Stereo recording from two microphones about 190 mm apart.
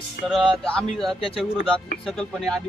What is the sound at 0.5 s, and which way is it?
Speech, 5° left (ahead or behind).